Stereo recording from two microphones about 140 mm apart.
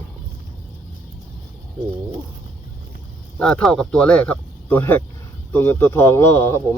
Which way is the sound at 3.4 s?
5° left (ahead or behind).